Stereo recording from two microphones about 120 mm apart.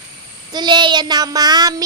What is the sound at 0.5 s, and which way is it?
Child singing, 40° right (ahead or behind).